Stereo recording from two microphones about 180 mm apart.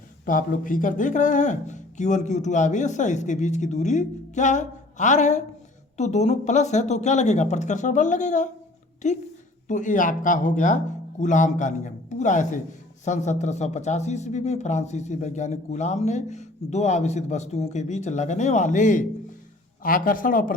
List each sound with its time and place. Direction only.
0.3 s speech: 50° left (ahead or behind)